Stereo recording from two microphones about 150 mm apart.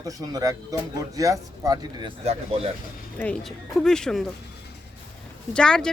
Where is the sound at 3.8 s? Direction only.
5° left (ahead or behind).